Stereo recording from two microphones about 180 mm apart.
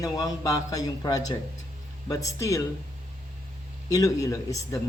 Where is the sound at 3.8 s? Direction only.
20° left (ahead or behind).